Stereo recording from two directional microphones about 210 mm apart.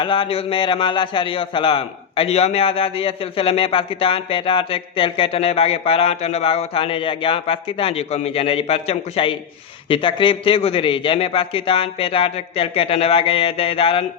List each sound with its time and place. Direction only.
0.0 s a man's voice: 25° left (ahead or behind)